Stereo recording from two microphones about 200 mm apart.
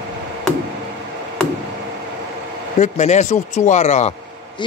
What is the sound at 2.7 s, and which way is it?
Speech, 35° left (ahead or behind).